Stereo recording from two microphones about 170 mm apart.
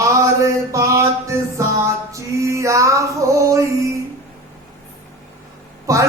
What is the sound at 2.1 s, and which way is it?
Child singing, 15° right (ahead or behind).